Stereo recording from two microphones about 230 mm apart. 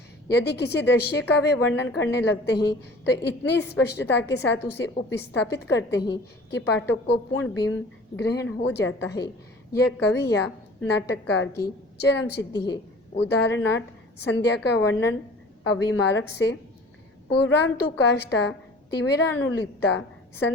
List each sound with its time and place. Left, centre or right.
0.3 s a woman's voice: left
14.3 s a woman's voice: left